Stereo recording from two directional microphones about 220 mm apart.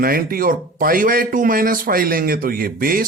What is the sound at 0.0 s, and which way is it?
A man's voice, 40° right (ahead or behind).